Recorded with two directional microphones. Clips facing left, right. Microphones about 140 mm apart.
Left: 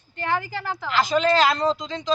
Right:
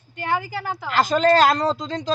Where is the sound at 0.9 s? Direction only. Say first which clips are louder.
Right 3 dB; 45° right (ahead or behind).